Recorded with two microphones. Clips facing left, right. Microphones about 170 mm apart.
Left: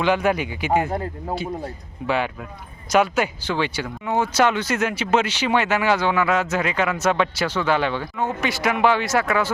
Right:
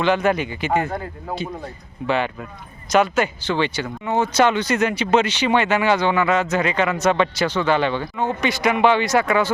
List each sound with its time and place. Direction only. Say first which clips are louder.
0.0 s speech: right 1 dB; 10° left (ahead or behind)